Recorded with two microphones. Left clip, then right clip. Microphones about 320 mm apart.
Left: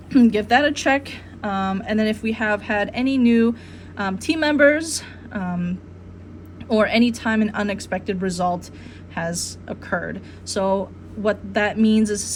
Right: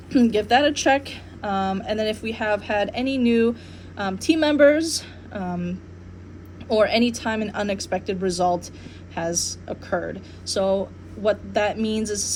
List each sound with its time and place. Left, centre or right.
0.1 s a woman's voice: left
9.9 s speech: left
10.5 s a woman's voice: left